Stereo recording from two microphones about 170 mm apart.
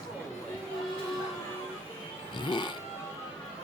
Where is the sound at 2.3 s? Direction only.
25° left (ahead or behind).